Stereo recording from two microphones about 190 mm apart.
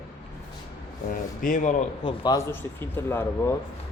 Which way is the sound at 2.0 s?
30° left (ahead or behind).